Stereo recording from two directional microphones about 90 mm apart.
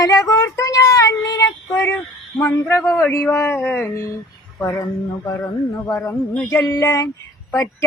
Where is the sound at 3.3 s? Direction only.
25° left (ahead or behind).